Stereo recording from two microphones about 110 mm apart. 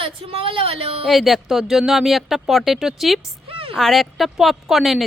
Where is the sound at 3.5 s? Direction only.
55° right (ahead or behind).